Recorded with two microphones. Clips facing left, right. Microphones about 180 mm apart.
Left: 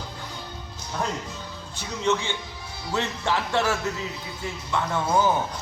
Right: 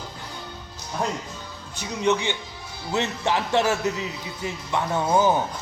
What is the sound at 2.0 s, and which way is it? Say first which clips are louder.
Speech: right 2 dB; 15° right (ahead or behind).